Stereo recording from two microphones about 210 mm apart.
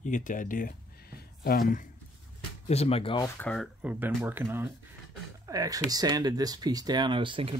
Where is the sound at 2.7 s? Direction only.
30° left (ahead or behind).